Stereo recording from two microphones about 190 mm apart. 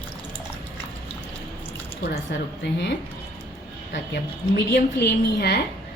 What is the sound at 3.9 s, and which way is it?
A woman's voice, 60° left (ahead or behind).